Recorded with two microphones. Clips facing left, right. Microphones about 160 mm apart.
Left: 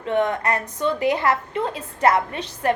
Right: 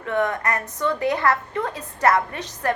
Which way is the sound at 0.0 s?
20° left (ahead or behind).